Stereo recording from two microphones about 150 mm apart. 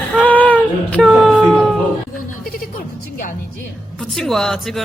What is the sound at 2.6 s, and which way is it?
Music, 65° left (ahead or behind).